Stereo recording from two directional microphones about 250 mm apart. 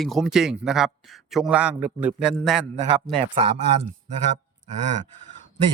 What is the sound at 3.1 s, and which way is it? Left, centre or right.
Speech, right.